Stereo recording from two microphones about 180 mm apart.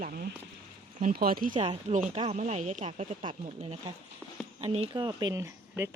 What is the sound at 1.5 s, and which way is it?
Speech, 25° right (ahead or behind).